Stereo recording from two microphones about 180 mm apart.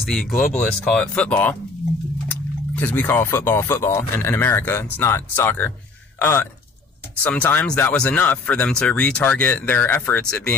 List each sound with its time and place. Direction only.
0.0 s a man's voice: centre (ahead or behind)